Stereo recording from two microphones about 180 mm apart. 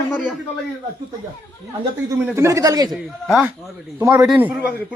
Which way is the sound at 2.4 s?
15° right (ahead or behind).